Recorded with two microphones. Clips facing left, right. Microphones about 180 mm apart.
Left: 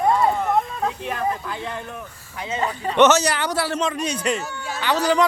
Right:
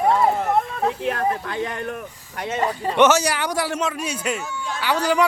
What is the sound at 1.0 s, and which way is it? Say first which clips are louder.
Speech: right 2 dB; 70° right (ahead or behind).